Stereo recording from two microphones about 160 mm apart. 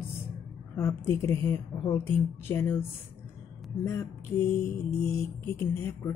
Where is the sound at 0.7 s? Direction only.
15° left (ahead or behind).